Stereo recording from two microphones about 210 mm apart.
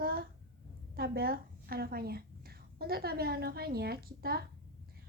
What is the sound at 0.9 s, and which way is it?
A woman's voice, 45° right (ahead or behind).